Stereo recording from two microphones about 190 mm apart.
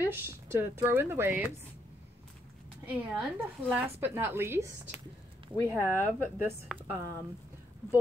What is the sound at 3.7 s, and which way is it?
Speech, 10° right (ahead or behind).